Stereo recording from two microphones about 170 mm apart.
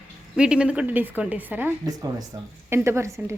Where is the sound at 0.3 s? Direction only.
5° right (ahead or behind).